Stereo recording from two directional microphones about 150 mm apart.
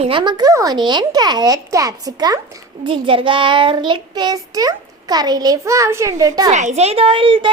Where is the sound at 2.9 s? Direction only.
35° right (ahead or behind).